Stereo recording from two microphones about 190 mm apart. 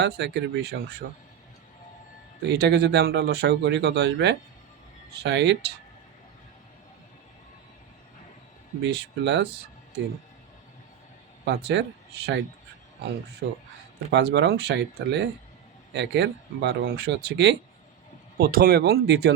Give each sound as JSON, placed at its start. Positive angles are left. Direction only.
{"t": 0.0, "sound": "speech", "side_deg": -60}
{"t": 2.4, "sound": "speech", "side_deg": -60}
{"t": 8.8, "sound": "speech", "side_deg": -65}
{"t": 11.4, "sound": "speech", "side_deg": -60}
{"t": 14.1, "sound": "speech", "side_deg": -65}
{"t": 18.3, "sound": "speech", "side_deg": -50}